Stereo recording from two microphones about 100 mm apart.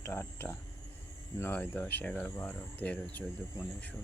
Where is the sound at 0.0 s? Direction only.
25° left (ahead or behind).